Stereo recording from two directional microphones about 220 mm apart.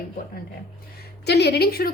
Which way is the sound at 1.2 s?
50° left (ahead or behind).